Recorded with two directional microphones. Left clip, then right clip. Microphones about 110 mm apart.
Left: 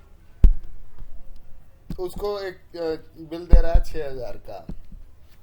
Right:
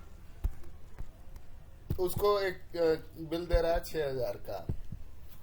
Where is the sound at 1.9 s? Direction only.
20° left (ahead or behind).